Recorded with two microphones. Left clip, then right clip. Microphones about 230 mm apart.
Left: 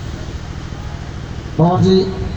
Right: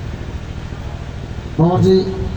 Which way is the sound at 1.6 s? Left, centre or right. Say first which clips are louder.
Left 1 dB; centre.